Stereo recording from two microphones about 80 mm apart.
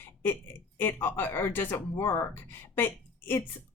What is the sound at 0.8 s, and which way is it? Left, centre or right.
Speech, left.